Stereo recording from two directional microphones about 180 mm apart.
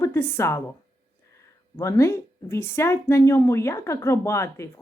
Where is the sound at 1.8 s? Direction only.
15° left (ahead or behind).